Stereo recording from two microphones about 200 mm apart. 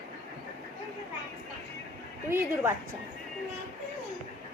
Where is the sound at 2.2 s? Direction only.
10° right (ahead or behind).